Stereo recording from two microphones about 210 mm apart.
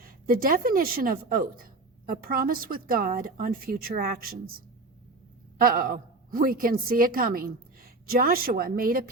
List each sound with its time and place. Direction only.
0.0 s a woman's voice: 45° right (ahead or behind)